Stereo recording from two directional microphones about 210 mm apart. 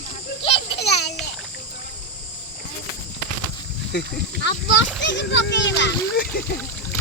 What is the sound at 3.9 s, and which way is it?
A child's voice, 55° left (ahead or behind).